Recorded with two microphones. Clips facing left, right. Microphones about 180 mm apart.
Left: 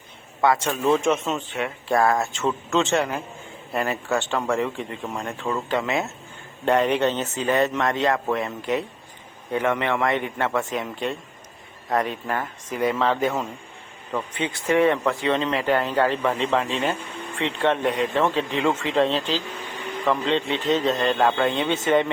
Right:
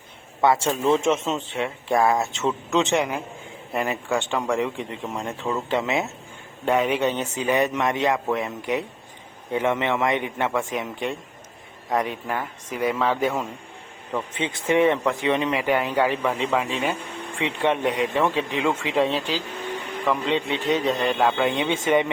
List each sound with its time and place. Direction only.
0.5 s a man's voice: 25° right (ahead or behind)
2.0 s speech: centre (ahead or behind)
2.6 s a man's voice: 15° right (ahead or behind)
6.7 s speech: 10° right (ahead or behind)
14.3 s speech: 20° right (ahead or behind)